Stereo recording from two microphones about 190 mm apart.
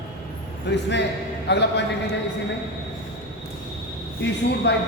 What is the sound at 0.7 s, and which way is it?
A man's voice, 65° left (ahead or behind).